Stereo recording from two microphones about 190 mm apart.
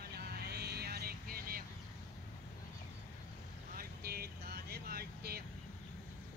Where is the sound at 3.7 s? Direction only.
55° right (ahead or behind).